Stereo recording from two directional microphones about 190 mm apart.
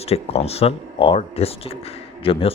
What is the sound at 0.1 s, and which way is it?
A man's voice, 30° left (ahead or behind).